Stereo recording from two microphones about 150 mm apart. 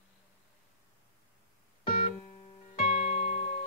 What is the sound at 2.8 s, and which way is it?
Music, 45° left (ahead or behind).